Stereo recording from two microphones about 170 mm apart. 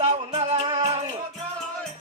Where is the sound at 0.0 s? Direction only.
45° right (ahead or behind).